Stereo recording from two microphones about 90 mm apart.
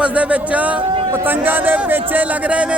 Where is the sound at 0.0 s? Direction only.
15° right (ahead or behind).